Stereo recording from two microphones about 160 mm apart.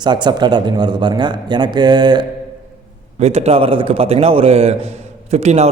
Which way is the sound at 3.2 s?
40° right (ahead or behind).